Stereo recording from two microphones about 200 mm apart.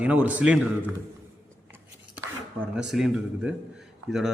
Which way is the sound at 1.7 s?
10° right (ahead or behind).